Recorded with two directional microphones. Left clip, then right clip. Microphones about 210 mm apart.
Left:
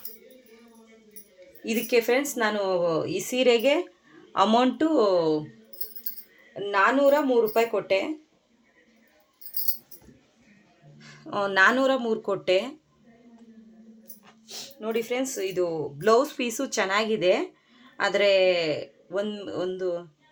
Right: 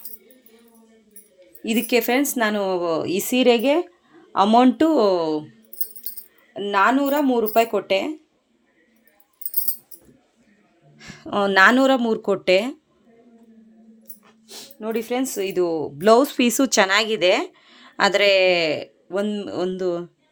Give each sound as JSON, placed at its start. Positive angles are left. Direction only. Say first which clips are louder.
{"t": 1.6, "sound": "speech", "louder": "right 3 dB", "side_deg": -50}
{"t": 6.5, "sound": "speech", "louder": "right 4 dB", "side_deg": -50}
{"t": 10.9, "sound": "speech", "louder": "right 6 dB", "side_deg": -45}
{"t": 14.4, "sound": "speech", "louder": "right 3 dB", "side_deg": -30}